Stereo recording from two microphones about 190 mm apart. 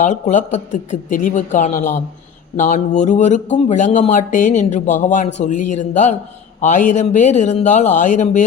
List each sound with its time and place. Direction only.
0.0 s speech: 40° left (ahead or behind)